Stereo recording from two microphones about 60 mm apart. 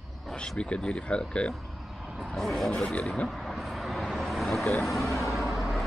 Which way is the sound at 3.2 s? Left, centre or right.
Centre.